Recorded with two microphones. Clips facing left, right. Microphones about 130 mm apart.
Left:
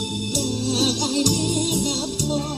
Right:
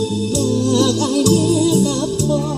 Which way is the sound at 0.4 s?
70° right (ahead or behind).